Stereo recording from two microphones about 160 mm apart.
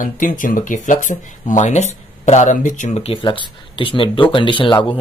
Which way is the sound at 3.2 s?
30° left (ahead or behind).